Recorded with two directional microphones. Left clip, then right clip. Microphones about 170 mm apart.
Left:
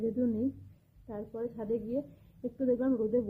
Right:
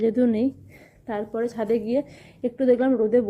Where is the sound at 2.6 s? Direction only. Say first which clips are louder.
Right 10 dB; 15° right (ahead or behind).